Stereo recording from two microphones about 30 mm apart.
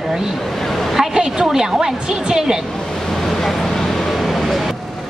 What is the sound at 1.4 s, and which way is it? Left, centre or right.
A woman's voice, centre.